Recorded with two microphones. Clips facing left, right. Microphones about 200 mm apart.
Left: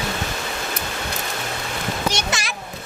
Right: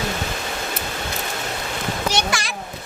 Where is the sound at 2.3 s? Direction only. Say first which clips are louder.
Right 2 dB; 20° left (ahead or behind).